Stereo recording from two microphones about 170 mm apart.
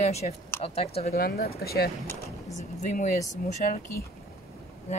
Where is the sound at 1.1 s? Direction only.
65° left (ahead or behind).